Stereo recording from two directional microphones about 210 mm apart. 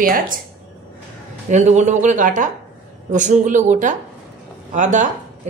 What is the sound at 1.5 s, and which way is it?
Speech, 35° right (ahead or behind).